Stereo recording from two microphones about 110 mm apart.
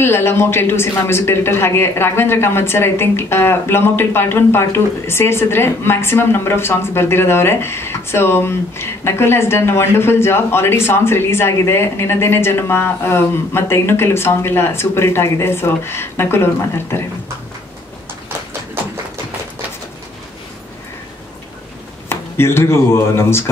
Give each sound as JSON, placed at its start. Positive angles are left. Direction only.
{"t": 0.0, "sound": "speech", "side_deg": 20}
{"t": 22.1, "sound": "speech", "side_deg": 20}